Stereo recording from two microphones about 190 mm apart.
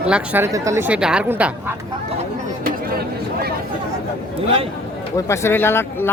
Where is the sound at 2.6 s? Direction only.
55° right (ahead or behind).